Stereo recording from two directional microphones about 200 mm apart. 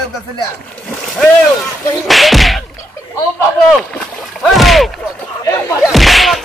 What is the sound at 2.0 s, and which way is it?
Whack, centre (ahead or behind).